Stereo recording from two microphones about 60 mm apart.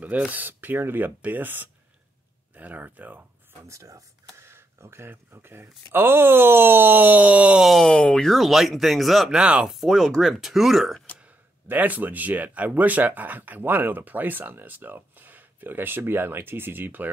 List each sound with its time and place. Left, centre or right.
0.3 s speech: right
3.6 s speech: right
4.5 s speech: right
7.6 s speech: centre
9.4 s speech: centre
9.7 s speech: centre
11.6 s speech: right